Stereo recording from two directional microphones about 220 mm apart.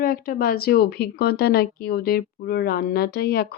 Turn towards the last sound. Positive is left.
turn(degrees=45)  # may be behind; listen again after turning